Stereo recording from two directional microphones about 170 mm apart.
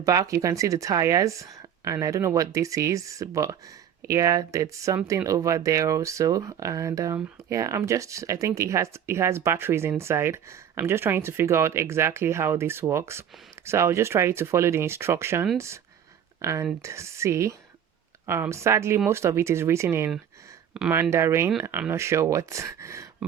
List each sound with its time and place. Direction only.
0.0 s speech: 20° right (ahead or behind)
20.7 s speech: 5° right (ahead or behind)
21.0 s speech: 15° right (ahead or behind)